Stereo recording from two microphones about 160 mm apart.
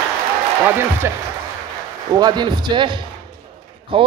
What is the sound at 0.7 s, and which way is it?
Speech, 15° right (ahead or behind).